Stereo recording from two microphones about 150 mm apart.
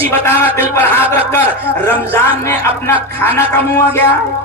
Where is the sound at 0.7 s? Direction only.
15° left (ahead or behind).